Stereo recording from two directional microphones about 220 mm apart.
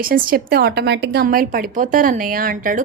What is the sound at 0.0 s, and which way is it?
A woman's voice, 40° right (ahead or behind).